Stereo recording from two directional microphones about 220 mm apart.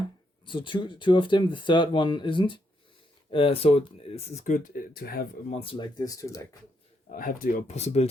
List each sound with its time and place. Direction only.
0.4 s speech: 20° left (ahead or behind); by 5.3 s 45° left (ahead or behind)
5.5 s speech: 25° left (ahead or behind)
7.1 s speech: 40° left (ahead or behind)